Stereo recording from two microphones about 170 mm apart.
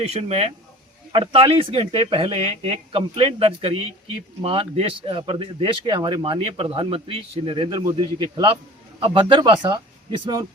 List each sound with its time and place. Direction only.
0.0 s speech: 40° right (ahead or behind)